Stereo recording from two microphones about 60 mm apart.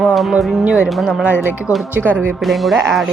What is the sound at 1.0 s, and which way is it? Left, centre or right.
Speech, centre.